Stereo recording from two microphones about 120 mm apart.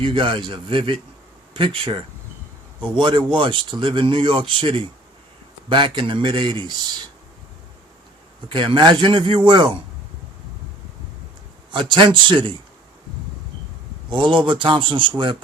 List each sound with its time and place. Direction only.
0.0 s a man's voice: 45° right (ahead or behind)
8.4 s speech: 45° right (ahead or behind)
11.7 s a man's voice: 40° right (ahead or behind)
14.1 s a man's voice: 40° right (ahead or behind)